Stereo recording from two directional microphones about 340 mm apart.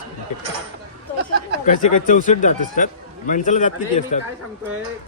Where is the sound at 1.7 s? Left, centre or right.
Left.